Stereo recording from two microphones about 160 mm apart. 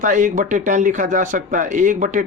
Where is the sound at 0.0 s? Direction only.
55° right (ahead or behind).